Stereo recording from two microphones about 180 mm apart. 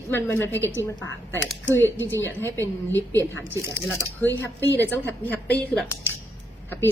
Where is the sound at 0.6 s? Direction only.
15° right (ahead or behind).